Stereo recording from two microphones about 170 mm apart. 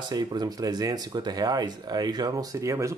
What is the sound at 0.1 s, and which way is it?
Speech, 25° right (ahead or behind).